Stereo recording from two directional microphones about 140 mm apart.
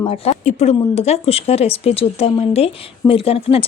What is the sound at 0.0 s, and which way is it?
Speech, 45° left (ahead or behind).